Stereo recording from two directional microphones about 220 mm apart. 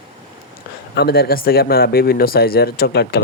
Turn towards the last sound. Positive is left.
turn(degrees=45)  # may be behind; listen again after turning